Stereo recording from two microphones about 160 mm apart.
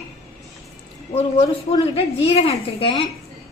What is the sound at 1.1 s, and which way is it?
A woman's voice, 40° left (ahead or behind).